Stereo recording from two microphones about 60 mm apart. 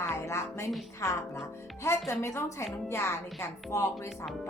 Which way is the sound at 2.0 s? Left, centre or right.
Left.